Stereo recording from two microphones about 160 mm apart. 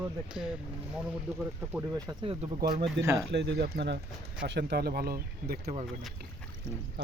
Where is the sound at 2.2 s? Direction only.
35° right (ahead or behind).